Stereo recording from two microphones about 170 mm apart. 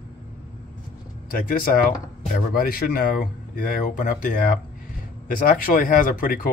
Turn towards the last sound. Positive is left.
turn(degrees=55)  # may be behind; listen again after turning